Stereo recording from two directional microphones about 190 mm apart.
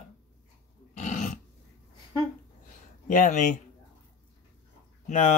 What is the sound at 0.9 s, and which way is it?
Dog, 40° left (ahead or behind).